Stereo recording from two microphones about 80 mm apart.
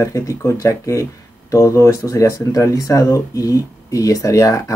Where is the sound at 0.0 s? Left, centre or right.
Left.